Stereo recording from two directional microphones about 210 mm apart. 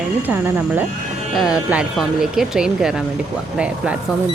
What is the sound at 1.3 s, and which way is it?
Speech, 5° right (ahead or behind).